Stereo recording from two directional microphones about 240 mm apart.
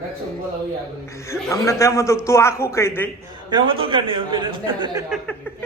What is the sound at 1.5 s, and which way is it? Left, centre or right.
Speech, centre.